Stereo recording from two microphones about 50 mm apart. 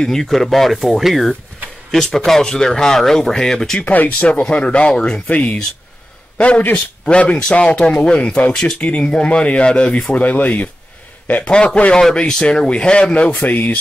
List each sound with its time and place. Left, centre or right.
0.0 s speech: centre
3.8 s speech: left
4.2 s speech: left
10.1 s a man's voice: left
11.5 s speech: left
13.3 s speech: left